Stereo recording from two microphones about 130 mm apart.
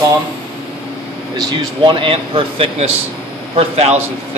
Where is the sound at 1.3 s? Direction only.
30° right (ahead or behind); by 3.9 s 50° right (ahead or behind).